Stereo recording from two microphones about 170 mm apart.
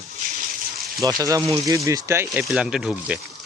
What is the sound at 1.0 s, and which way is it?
A man's voice, 20° right (ahead or behind).